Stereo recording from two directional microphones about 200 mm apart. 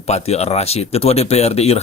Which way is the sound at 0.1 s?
30° left (ahead or behind).